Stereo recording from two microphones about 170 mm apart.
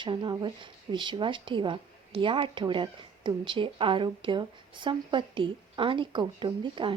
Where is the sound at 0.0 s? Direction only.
25° right (ahead or behind).